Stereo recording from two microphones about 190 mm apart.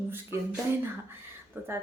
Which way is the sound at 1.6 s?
10° right (ahead or behind).